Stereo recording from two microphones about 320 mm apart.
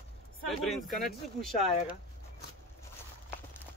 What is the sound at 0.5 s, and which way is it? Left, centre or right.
Speech, centre.